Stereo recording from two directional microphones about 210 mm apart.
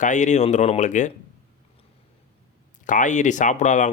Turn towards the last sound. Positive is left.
turn(degrees=35)  # may be behind; listen again after turning